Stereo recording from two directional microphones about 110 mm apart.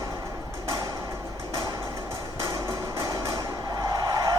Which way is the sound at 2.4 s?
30° right (ahead or behind).